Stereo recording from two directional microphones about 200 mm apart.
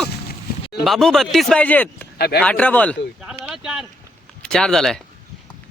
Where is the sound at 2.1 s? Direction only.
50° left (ahead or behind).